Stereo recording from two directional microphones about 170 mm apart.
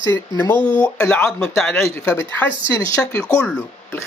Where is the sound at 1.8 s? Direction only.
15° left (ahead or behind).